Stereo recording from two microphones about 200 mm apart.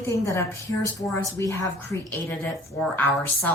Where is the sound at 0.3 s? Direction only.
15° left (ahead or behind).